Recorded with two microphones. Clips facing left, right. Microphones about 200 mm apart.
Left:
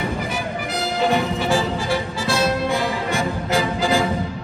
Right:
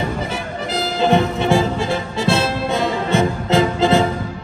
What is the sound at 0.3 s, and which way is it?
Music, 25° right (ahead or behind).